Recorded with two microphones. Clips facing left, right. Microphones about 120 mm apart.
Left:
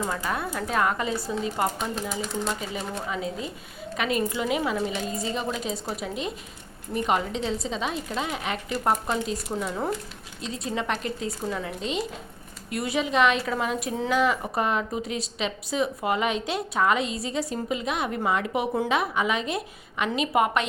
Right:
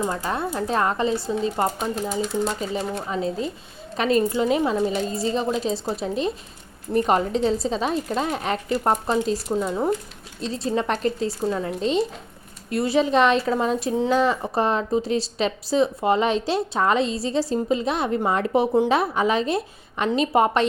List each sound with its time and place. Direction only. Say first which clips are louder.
0.1 s speech: right 3 dB; 30° right (ahead or behind)
9.5 s speech: right 6 dB; 20° right (ahead or behind)
10.4 s speech: right 5 dB; 35° right (ahead or behind)